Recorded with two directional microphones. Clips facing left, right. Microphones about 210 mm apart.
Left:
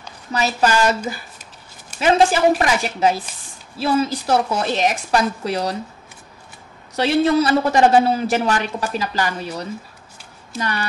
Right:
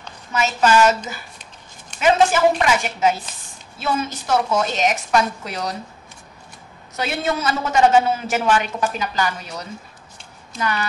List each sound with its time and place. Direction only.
0.3 s a man's voice: 35° left (ahead or behind)
7.0 s a man's voice: 35° left (ahead or behind)